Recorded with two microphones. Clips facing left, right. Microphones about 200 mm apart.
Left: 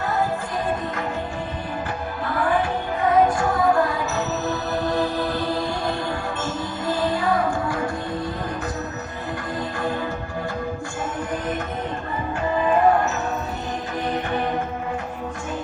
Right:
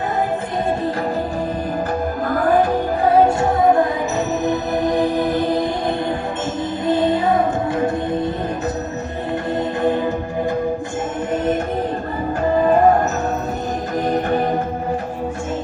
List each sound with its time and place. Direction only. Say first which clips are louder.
2.2 s music: right 5 dB; 40° right (ahead or behind); by 5.6 s 20° right (ahead or behind)
6.8 s music: right 6 dB; 20° right (ahead or behind)
12.5 s music: right 4 dB; 45° right (ahead or behind)
14.1 s music: right 6 dB; 40° right (ahead or behind)